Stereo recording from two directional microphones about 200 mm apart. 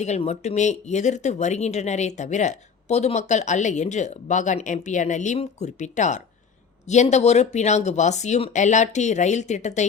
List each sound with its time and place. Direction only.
0.0 s speech: 35° left (ahead or behind)